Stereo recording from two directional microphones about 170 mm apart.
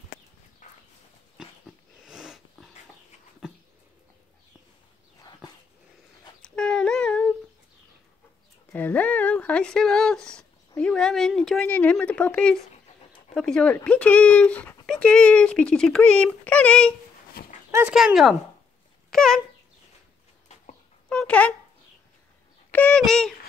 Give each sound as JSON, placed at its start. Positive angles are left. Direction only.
{"t": 0.6, "sound": "horse", "side_deg": 45}
{"t": 2.0, "sound": "cat", "side_deg": -5}
{"t": 6.4, "sound": "child singing", "side_deg": 5}
{"t": 8.7, "sound": "a woman's voice", "side_deg": 10}
{"t": 17.6, "sound": "dog", "side_deg": -15}
{"t": 17.9, "sound": "speech", "side_deg": 0}
{"t": 19.0, "sound": "a sound", "side_deg": 5}
{"t": 21.1, "sound": "a sound", "side_deg": 5}
{"t": 22.7, "sound": "a sound", "side_deg": 5}